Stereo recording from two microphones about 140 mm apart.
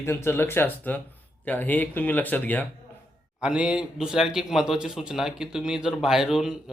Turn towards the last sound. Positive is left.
turn(degrees=-5)  # may be behind; listen again after turning